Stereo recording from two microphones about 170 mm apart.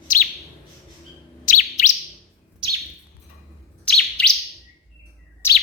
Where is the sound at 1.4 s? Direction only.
45° left (ahead or behind).